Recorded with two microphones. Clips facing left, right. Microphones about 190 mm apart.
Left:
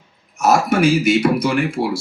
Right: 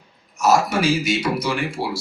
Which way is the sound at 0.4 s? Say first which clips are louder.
Left 3 dB; 55° left (ahead or behind).